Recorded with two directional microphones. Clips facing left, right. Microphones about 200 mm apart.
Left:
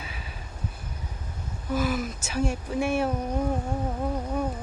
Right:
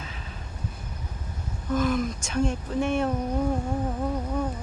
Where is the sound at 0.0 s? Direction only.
10° left (ahead or behind).